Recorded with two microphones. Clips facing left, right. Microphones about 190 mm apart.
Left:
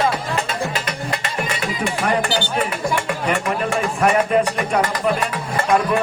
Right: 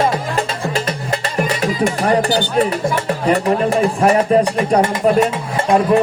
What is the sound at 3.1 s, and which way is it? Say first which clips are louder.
Music: right 6 dB; 35° right (ahead or behind).